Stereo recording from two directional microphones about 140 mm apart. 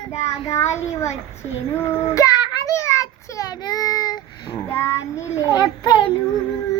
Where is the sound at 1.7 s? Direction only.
15° left (ahead or behind); by 4.6 s 35° left (ahead or behind).